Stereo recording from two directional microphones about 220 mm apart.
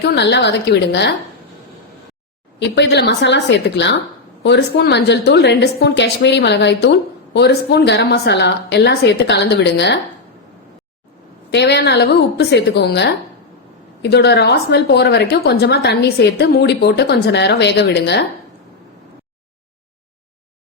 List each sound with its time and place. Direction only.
0.0 s a woman's voice: 50° left (ahead or behind)
2.6 s a woman's voice: 50° left (ahead or behind)
11.5 s a woman's voice: 50° left (ahead or behind)